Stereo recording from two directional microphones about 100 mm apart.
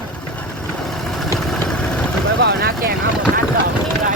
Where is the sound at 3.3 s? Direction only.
20° left (ahead or behind).